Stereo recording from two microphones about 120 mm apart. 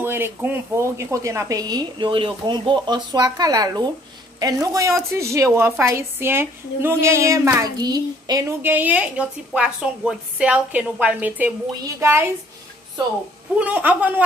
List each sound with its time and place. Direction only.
0.0 s a woman's voice: 20° right (ahead or behind)
8.6 s a woman's voice: 15° right (ahead or behind)
13.6 s a woman's voice: 15° right (ahead or behind)